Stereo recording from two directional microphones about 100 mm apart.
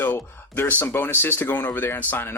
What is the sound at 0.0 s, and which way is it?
Speech, 20° left (ahead or behind).